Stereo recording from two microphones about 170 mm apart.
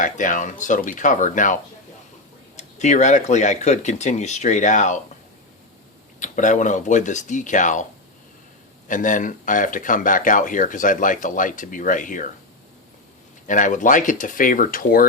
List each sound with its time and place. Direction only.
0.0 s speech: 50° left (ahead or behind)
2.6 s speech: 45° left (ahead or behind)
6.1 s speech: 50° left (ahead or behind)
8.9 s speech: 50° left (ahead or behind)
13.5 s speech: 50° left (ahead or behind)